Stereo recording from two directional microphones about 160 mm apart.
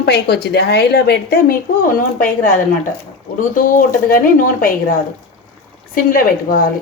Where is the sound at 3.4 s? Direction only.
55° left (ahead or behind).